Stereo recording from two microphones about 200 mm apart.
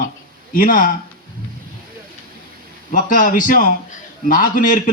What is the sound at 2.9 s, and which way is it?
A man's voice, 45° left (ahead or behind).